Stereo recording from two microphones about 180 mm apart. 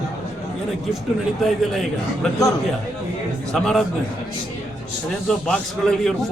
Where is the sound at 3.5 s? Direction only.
5° left (ahead or behind).